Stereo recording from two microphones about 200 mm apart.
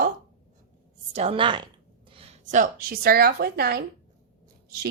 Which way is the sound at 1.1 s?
30° right (ahead or behind).